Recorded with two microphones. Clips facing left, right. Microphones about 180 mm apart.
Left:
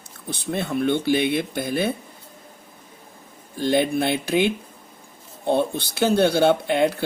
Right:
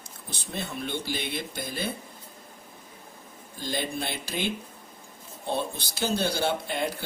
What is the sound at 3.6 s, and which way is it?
Speech, 60° left (ahead or behind).